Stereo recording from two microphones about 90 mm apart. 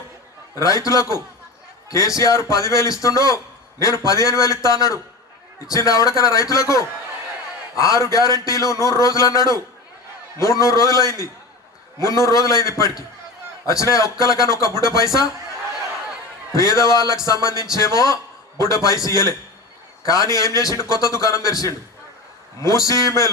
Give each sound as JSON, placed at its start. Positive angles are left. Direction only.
{"t": 0.5, "sound": "a man's voice", "side_deg": 40}
{"t": 16.6, "sound": "a man's voice", "side_deg": 40}